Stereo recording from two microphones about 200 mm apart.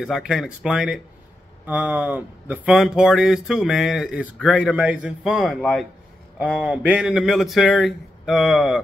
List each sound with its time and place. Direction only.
0.0 s speech: 5° right (ahead or behind)